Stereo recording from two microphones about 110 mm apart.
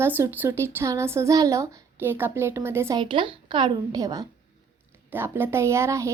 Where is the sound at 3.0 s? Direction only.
50° right (ahead or behind).